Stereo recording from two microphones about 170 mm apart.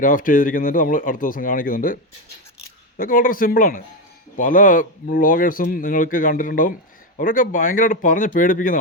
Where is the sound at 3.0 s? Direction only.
55° left (ahead or behind).